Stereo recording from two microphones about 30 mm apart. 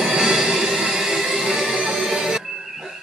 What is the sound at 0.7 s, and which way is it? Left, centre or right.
Music, centre.